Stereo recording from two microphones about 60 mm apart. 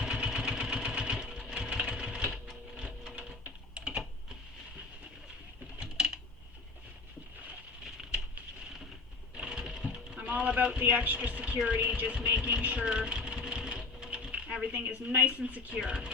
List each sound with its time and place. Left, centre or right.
0.0 s vehicle: centre
3.8 s typing: centre
5.8 s coin: centre
9.3 s a sound: centre
11.6 s speech: centre
12.6 s a sound: centre
14.1 s speech: centre